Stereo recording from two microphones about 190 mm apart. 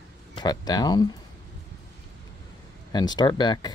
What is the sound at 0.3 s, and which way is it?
Speech, 20° left (ahead or behind).